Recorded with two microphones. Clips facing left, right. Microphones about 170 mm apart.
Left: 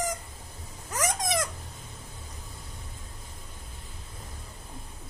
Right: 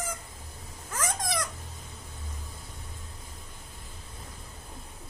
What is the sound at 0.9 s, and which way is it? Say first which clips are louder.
Dog: left 3 dB; 20° left (ahead or behind).